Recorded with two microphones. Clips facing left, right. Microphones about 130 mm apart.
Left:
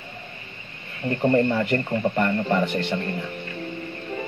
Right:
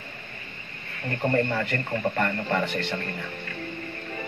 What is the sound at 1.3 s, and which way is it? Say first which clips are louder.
Speech: left 5 dB; 25° left (ahead or behind).